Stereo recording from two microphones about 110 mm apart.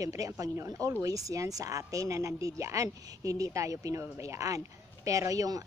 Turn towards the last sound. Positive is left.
turn(degrees=-30)  # may be behind; listen again after turning